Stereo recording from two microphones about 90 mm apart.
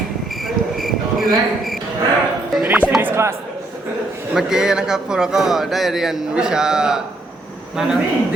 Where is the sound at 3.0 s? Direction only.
30° right (ahead or behind).